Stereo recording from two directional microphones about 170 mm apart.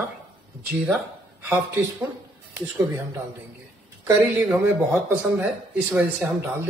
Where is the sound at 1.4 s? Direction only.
15° right (ahead or behind).